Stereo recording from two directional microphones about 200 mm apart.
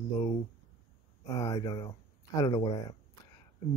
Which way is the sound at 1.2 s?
15° left (ahead or behind).